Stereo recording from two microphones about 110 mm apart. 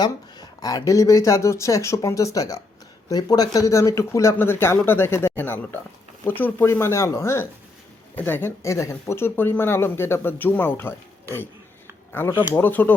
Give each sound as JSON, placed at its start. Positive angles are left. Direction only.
{"t": 0.0, "sound": "speech", "side_deg": 35}